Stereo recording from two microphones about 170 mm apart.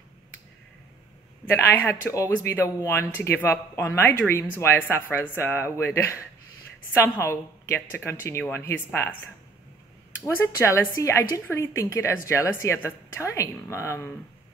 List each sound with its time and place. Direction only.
1.4 s speech: 10° left (ahead or behind)